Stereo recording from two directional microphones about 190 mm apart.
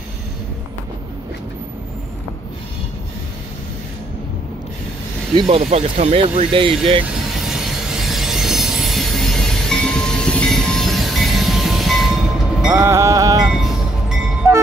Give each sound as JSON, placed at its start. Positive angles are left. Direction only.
{"t": 5.3, "sound": "speech", "side_deg": -30}
{"t": 7.9, "sound": "train", "side_deg": 0}
{"t": 12.6, "sound": "music", "side_deg": -15}
{"t": 13.5, "sound": "train", "side_deg": 0}